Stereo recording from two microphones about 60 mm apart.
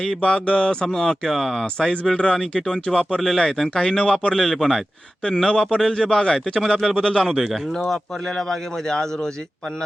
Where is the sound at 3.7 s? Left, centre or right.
Centre.